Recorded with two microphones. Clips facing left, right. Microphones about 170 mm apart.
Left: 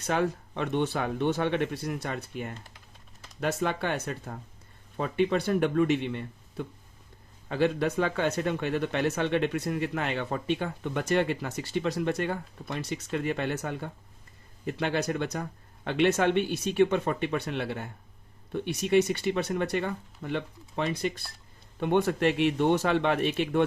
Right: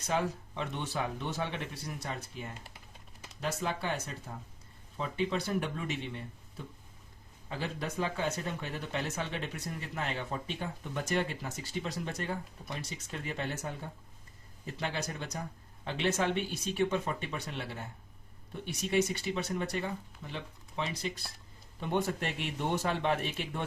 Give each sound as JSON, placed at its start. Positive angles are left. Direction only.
{"t": 0.1, "sound": "speech", "side_deg": 60}